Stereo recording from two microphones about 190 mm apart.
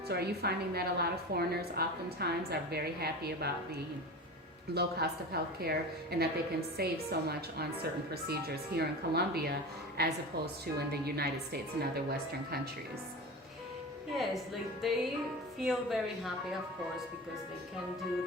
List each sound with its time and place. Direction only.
0.1 s a woman's voice: 55° right (ahead or behind)
4.7 s a woman's voice: 60° right (ahead or behind)
14.2 s speech: centre (ahead or behind)